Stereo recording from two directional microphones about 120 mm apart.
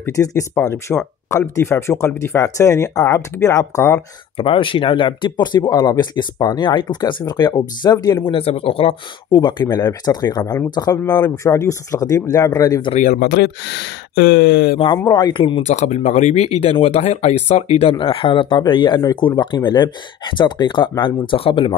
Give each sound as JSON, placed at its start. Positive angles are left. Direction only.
{"t": 0.0, "sound": "speech", "side_deg": 25}
{"t": 4.4, "sound": "speech", "side_deg": 45}
{"t": 9.4, "sound": "speech", "side_deg": 35}
{"t": 11.2, "sound": "speech", "side_deg": 20}
{"t": 14.8, "sound": "speech", "side_deg": 40}
{"t": 15.6, "sound": "speech", "side_deg": 75}